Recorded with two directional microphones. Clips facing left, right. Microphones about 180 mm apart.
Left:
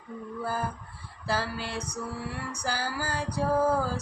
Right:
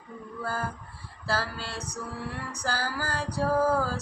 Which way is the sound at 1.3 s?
15° left (ahead or behind).